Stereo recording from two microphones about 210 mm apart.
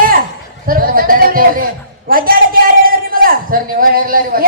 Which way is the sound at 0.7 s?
45° right (ahead or behind).